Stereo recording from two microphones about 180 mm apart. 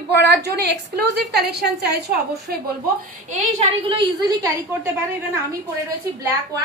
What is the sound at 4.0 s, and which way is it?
Speech, 20° right (ahead or behind).